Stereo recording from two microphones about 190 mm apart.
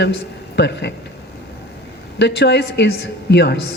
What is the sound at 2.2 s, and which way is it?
A woman's voice, 60° left (ahead or behind).